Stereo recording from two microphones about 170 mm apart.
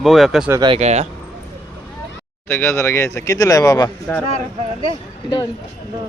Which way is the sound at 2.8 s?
15° left (ahead or behind).